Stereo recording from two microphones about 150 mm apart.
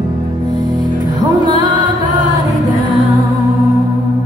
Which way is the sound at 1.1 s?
30° right (ahead or behind).